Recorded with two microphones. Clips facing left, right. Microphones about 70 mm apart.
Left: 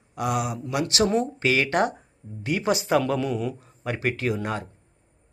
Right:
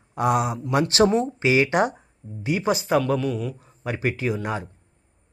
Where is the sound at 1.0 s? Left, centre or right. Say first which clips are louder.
Right 5 dB; right.